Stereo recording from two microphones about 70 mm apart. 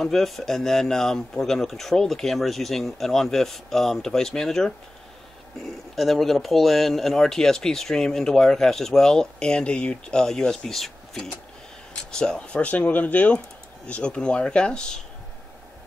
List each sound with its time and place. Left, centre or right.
0.0 s a man's voice: centre
5.9 s speech: centre